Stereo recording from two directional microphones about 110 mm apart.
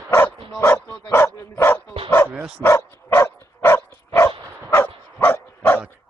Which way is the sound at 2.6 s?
20° left (ahead or behind).